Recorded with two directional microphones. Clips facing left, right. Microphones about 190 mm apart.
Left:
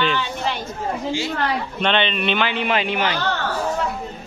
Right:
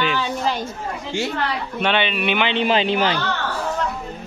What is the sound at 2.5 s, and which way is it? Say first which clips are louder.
Speech: right 3 dB; 30° right (ahead or behind).